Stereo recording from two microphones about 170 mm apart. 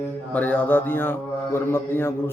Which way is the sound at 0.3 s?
10° left (ahead or behind).